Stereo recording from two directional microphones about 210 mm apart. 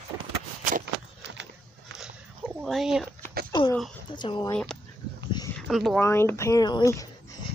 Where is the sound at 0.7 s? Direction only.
40° right (ahead or behind).